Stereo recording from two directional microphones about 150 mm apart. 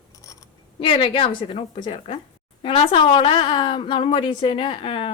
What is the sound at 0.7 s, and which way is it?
Speech, 40° left (ahead or behind).